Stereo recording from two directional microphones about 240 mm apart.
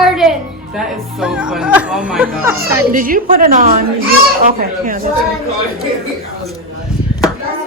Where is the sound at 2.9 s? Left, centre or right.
Right.